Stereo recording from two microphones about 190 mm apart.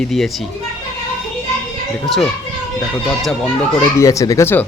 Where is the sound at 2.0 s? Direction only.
Centre (ahead or behind).